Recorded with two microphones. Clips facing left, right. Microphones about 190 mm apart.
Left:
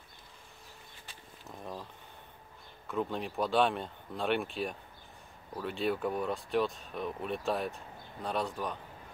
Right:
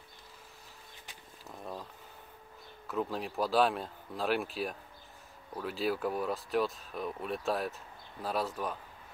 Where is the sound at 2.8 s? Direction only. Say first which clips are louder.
Even; centre (ahead or behind).